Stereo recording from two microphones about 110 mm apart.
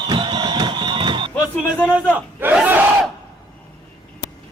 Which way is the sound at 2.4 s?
15° right (ahead or behind).